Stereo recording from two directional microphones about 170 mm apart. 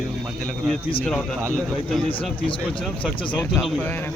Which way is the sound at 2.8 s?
5° left (ahead or behind).